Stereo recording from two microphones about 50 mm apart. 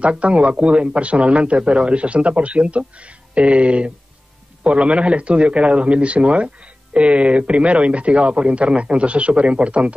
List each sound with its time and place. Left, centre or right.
0.0 s a man's voice: right